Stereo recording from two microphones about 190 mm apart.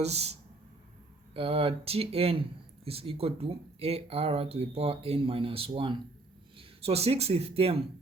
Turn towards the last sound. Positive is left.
turn(degrees=-30)  # may be behind; listen again after turning